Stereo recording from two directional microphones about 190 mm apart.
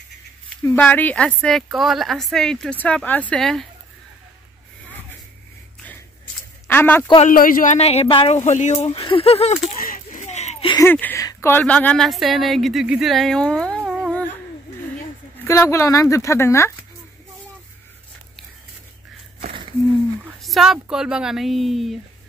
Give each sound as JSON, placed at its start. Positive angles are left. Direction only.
{"t": 0.5, "sound": "a woman's voice", "side_deg": 5}
{"t": 6.7, "sound": "speech", "side_deg": 10}
{"t": 7.2, "sound": "speech", "side_deg": 45}
{"t": 9.8, "sound": "a sound", "side_deg": 45}
{"t": 10.7, "sound": "speech", "side_deg": 10}
{"t": 15.4, "sound": "speech", "side_deg": 15}
{"t": 20.2, "sound": "a woman's voice", "side_deg": 0}